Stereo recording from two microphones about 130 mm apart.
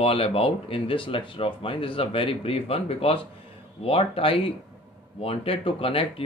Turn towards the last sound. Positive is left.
turn(degrees=45)  # may be behind; listen again after turning